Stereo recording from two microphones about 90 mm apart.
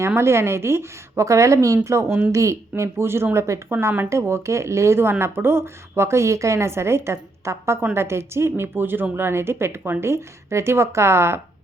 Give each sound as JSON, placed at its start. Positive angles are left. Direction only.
{"t": 0.2, "sound": "a woman's voice", "side_deg": -30}